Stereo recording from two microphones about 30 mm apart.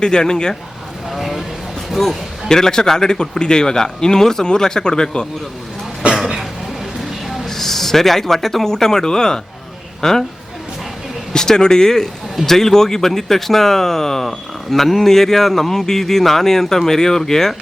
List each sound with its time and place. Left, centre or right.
0.0 s a man's voice: left
1.1 s speech: centre
2.5 s a man's voice: centre
7.4 s speech: centre
11.3 s a man's voice: left